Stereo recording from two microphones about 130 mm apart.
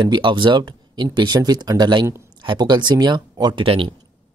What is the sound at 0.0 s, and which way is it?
Speech, 35° right (ahead or behind).